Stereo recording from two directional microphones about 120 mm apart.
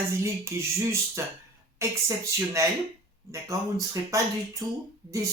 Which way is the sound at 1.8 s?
25° right (ahead or behind).